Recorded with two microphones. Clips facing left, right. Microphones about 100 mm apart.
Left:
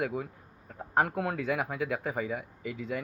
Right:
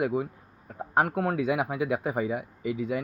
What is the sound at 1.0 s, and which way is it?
Speech, 5° right (ahead or behind).